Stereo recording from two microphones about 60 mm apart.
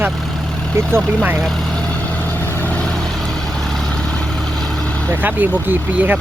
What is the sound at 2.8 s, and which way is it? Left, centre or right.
Vehicle, centre.